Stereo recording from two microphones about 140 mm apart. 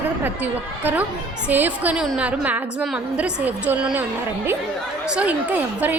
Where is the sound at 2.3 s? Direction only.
10° right (ahead or behind).